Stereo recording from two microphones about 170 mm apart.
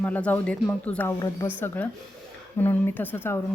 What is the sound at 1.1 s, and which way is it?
Speech, 20° left (ahead or behind).